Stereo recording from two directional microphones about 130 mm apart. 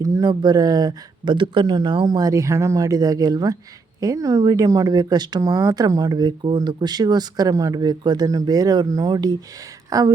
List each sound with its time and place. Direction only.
0.0 s speech: 35° right (ahead or behind)